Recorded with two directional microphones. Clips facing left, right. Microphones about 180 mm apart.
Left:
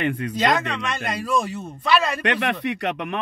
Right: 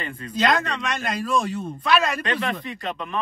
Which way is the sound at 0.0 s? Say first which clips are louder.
Left 9 dB; 70° left (ahead or behind).